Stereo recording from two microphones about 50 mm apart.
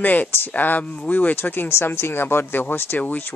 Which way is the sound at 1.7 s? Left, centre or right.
Left.